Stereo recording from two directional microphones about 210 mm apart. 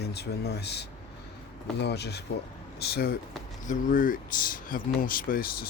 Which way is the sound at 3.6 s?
40° left (ahead or behind).